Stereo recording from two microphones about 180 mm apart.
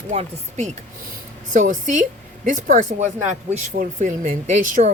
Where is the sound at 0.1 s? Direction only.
40° right (ahead or behind).